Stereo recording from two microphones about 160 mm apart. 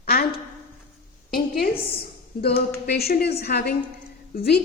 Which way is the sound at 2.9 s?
75° left (ahead or behind).